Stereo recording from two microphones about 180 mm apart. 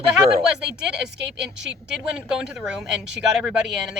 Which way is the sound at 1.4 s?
70° right (ahead or behind).